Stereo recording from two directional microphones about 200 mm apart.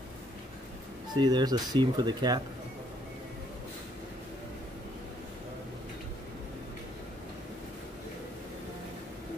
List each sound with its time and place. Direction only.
1.2 s speech: 20° right (ahead or behind)